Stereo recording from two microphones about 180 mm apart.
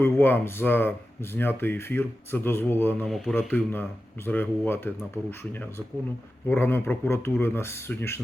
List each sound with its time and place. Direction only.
0.0 s speech: 10° left (ahead or behind)